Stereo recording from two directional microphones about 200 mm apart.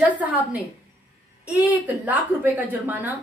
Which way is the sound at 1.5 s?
5° right (ahead or behind).